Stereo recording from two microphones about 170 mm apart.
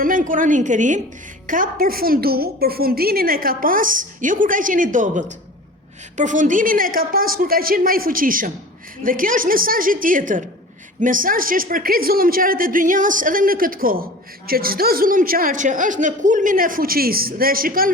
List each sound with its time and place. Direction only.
0.0 s a woman's voice: 55° right (ahead or behind)